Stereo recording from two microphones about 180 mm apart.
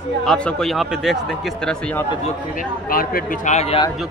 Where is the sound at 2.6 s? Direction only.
50° left (ahead or behind); by 3.9 s 35° left (ahead or behind).